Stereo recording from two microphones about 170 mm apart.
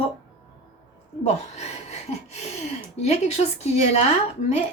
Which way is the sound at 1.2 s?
40° left (ahead or behind).